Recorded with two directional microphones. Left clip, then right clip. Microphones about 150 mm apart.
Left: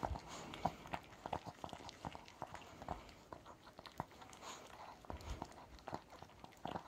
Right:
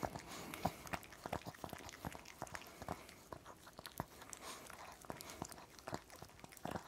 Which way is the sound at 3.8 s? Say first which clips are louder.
Even; 30° right (ahead or behind).